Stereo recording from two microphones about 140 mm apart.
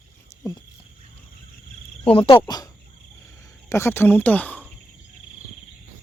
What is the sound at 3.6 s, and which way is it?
Speech, 20° left (ahead or behind).